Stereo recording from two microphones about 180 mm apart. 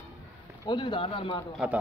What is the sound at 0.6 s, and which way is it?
Speech, 25° left (ahead or behind).